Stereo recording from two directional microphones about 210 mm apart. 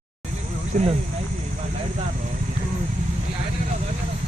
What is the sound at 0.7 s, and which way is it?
Speech, 40° right (ahead or behind).